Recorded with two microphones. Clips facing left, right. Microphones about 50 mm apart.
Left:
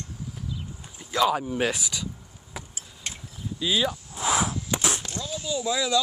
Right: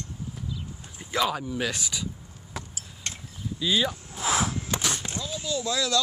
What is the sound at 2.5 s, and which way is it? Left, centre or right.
Chop, centre.